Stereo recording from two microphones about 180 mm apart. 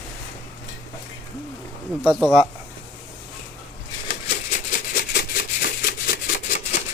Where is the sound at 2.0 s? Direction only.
Centre (ahead or behind).